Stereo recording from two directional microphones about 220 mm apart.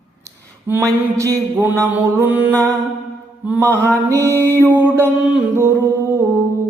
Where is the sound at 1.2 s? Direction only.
10° right (ahead or behind).